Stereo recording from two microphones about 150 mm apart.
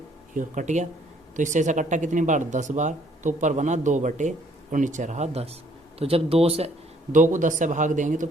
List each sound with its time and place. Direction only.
0.3 s speech: 55° right (ahead or behind)
7.1 s speech: 60° right (ahead or behind)